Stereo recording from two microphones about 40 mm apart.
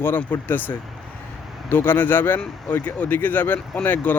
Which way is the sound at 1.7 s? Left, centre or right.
Left.